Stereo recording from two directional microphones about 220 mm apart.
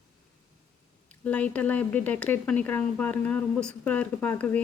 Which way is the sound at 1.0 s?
5° left (ahead or behind).